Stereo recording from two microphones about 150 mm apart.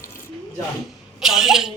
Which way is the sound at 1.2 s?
5° right (ahead or behind).